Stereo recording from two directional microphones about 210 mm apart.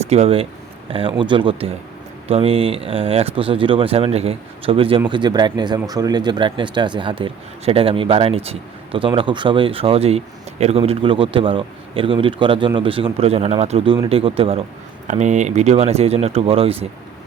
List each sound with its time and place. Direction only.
0.1 s speech: 30° right (ahead or behind)